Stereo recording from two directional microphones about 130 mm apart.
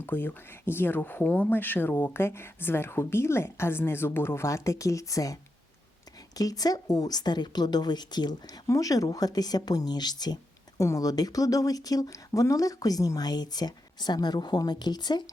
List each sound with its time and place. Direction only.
0.0 s a woman's voice: 15° left (ahead or behind); by 15.2 s 35° left (ahead or behind)